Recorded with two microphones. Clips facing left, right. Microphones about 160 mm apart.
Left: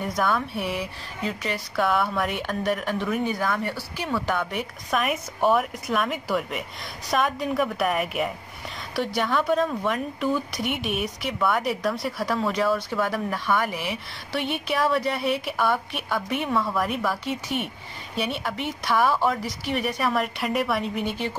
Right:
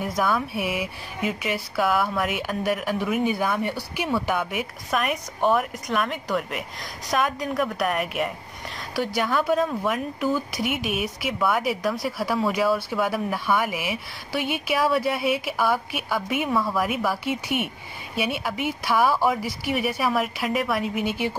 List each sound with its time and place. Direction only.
0.0 s a woman's voice: centre (ahead or behind)